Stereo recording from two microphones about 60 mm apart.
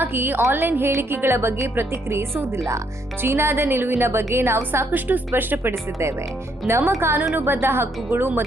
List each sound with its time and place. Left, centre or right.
0.0 s a woman's voice: right
4.9 s a woman's voice: right